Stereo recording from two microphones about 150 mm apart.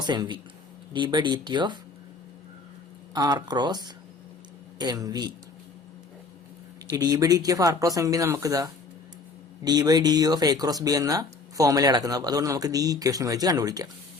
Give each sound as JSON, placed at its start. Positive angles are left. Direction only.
{"t": 0.0, "sound": "speech", "side_deg": -30}
{"t": 3.2, "sound": "speech", "side_deg": -30}
{"t": 6.9, "sound": "speech", "side_deg": -25}